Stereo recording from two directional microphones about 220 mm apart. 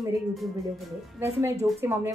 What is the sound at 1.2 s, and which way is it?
Female singing, 15° right (ahead or behind).